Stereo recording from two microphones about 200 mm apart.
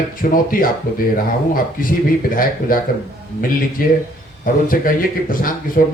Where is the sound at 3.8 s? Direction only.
45° left (ahead or behind).